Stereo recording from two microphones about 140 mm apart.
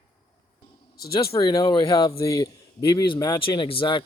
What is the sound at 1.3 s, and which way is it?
Speech, 30° left (ahead or behind).